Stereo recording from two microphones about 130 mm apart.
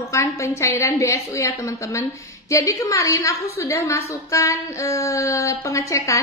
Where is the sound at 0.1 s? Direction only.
20° left (ahead or behind).